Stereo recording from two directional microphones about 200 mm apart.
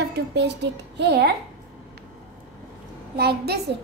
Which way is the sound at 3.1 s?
55° right (ahead or behind).